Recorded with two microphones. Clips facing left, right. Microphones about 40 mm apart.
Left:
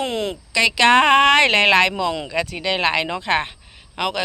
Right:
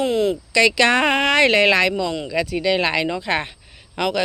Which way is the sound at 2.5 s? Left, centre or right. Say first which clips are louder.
Right 1 dB; left.